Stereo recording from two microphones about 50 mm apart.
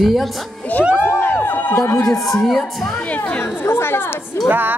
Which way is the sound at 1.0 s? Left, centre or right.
Left.